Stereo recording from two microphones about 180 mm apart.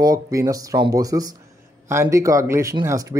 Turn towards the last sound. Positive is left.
turn(degrees=-15)  # may be behind; listen again after turning